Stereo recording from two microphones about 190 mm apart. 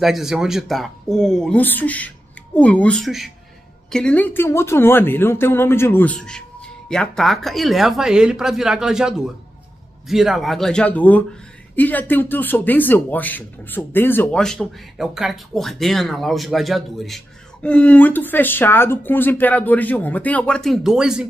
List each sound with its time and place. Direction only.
0.0 s a man's voice: centre (ahead or behind)